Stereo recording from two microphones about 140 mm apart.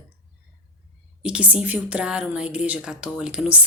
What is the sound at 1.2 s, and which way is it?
Speech, 10° right (ahead or behind).